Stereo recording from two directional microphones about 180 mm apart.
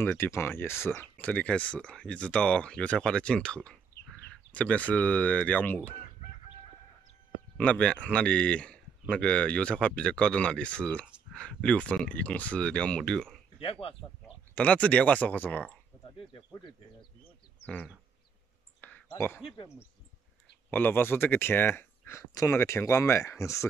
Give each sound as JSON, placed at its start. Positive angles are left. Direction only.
{"t": 0.0, "sound": "speech", "side_deg": 15}
{"t": 7.5, "sound": "speech", "side_deg": 5}
{"t": 13.6, "sound": "speech", "side_deg": 30}
{"t": 14.5, "sound": "speech", "side_deg": 5}
{"t": 16.2, "sound": "speech", "side_deg": 25}
{"t": 18.8, "sound": "a sound", "side_deg": 10}
{"t": 19.1, "sound": "speech", "side_deg": 10}
{"t": 20.7, "sound": "speech", "side_deg": 10}